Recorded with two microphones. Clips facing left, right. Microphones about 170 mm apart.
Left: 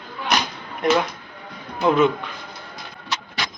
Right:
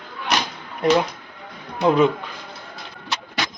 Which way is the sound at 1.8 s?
35° right (ahead or behind).